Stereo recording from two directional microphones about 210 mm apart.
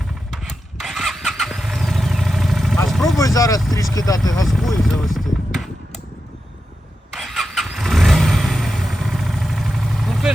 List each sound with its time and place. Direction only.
0.3 s vehicle: centre (ahead or behind)
3.2 s speech: 15° left (ahead or behind)
4.4 s speech: centre (ahead or behind)
7.1 s vehicle: centre (ahead or behind)